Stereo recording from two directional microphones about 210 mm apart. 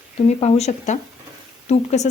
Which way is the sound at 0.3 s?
30° left (ahead or behind).